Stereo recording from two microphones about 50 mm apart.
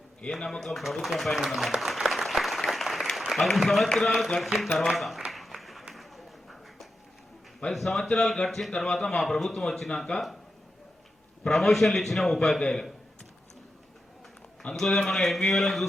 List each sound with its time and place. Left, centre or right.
0.2 s a man's voice: centre
1.5 s applause: centre
3.2 s a sound: centre
3.9 s a man's voice: centre
5.3 s applause: centre
5.9 s a sound: centre
7.7 s a man's voice: centre
11.4 s a man's voice: centre
12.5 s speech: centre
14.8 s a man's voice: centre